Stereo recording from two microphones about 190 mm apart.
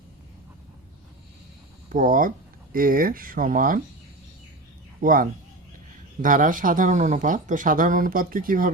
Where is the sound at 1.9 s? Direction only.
45° right (ahead or behind).